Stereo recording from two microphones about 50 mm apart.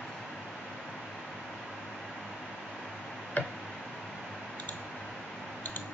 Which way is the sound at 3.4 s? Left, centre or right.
Left.